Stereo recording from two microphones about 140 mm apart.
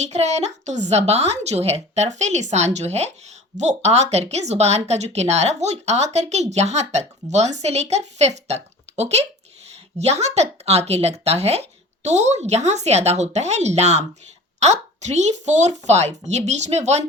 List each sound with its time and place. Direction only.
0.0 s speech: 50° right (ahead or behind)